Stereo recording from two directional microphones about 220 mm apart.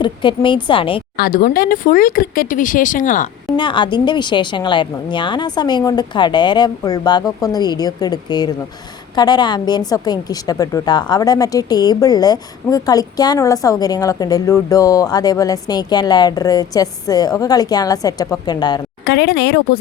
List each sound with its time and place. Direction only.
0.0 s a woman's voice: 20° left (ahead or behind)
1.1 s speech: 40° left (ahead or behind)
3.6 s a woman's voice: 20° left (ahead or behind)
19.0 s speech: 50° left (ahead or behind)